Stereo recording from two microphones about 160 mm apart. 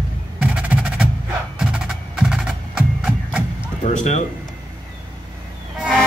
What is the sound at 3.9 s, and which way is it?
Speech, 45° left (ahead or behind).